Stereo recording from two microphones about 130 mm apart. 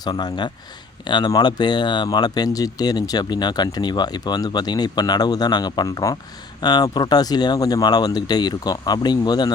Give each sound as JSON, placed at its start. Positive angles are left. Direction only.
{"t": 0.0, "sound": "speech", "side_deg": 35}